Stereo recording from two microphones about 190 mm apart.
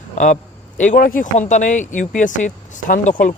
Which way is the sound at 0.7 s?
40° left (ahead or behind).